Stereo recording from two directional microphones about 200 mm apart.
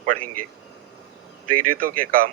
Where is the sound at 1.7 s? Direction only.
45° right (ahead or behind).